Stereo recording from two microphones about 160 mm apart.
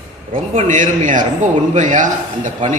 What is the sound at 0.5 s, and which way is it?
A man's voice, 50° right (ahead or behind).